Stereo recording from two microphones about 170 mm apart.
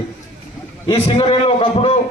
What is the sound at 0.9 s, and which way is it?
A man's voice, 30° left (ahead or behind).